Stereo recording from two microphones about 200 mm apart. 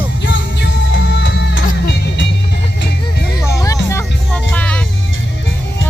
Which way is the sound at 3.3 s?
15° left (ahead or behind).